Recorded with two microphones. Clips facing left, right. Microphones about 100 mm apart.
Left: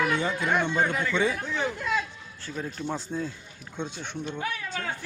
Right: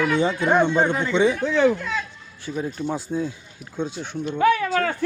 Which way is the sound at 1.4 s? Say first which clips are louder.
Right 11 dB; 90° right.